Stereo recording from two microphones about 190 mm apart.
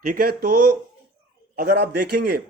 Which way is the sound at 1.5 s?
55° right (ahead or behind).